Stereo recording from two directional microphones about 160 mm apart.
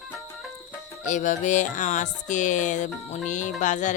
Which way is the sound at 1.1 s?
50° left (ahead or behind).